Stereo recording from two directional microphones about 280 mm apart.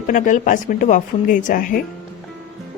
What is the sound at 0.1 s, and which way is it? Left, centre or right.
Speech, left.